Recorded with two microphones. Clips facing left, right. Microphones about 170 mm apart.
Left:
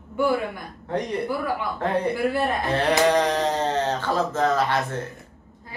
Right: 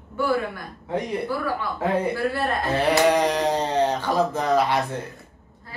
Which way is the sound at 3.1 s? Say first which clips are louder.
Right 1 dB; 10° right (ahead or behind).